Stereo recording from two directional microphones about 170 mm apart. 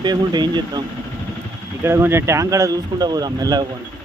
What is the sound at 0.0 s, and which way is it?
Speech, 25° right (ahead or behind).